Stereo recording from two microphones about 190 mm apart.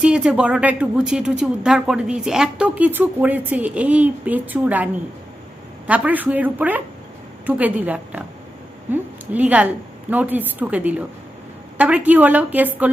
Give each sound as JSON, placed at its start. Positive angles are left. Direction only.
{"t": 0.0, "sound": "speech", "side_deg": -5}
{"t": 5.9, "sound": "speech", "side_deg": -10}